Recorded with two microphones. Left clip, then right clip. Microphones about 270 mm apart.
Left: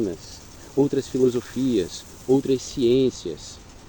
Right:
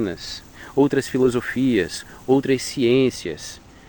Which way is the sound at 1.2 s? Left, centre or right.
Right.